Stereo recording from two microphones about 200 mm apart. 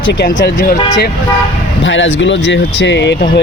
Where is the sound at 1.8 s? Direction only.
70° left (ahead or behind).